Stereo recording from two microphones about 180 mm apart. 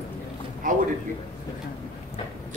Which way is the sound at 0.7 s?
45° right (ahead or behind).